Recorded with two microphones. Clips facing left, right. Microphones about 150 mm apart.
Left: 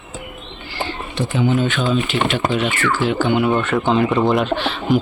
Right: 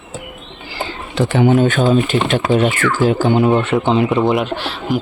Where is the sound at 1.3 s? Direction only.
60° right (ahead or behind); by 3.4 s 40° right (ahead or behind).